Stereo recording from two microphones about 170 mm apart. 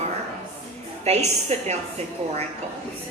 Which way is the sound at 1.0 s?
40° right (ahead or behind).